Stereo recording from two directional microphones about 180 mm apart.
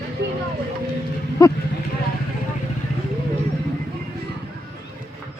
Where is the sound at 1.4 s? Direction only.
20° left (ahead or behind).